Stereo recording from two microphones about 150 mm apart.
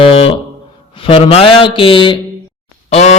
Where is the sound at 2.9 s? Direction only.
45° left (ahead or behind).